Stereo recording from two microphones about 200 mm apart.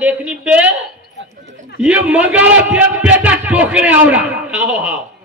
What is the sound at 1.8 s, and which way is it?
A man's voice, 5° right (ahead or behind).